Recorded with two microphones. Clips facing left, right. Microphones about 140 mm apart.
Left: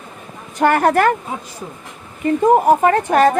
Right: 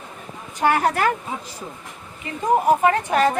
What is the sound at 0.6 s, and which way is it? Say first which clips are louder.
Speech: left 5 dB; 55° left (ahead or behind).